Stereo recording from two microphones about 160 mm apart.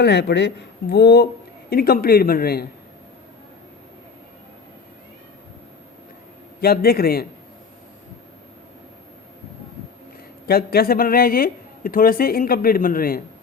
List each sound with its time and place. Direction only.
0.0 s speech: 90° left
1.7 s speech: 70° left (ahead or behind)
6.6 s speech: 75° left (ahead or behind)
10.4 s speech: 75° left (ahead or behind)